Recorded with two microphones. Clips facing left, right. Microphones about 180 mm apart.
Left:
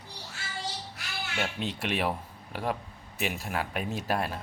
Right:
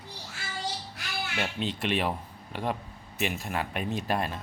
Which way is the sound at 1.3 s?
5° left (ahead or behind).